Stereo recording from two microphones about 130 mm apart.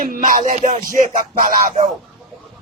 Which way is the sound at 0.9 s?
85° right.